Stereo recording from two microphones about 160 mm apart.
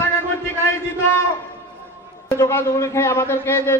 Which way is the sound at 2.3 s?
15° left (ahead or behind).